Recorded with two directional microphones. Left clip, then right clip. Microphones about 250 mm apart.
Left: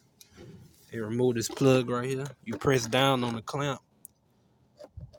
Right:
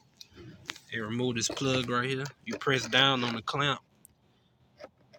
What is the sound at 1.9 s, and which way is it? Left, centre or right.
Speech, centre.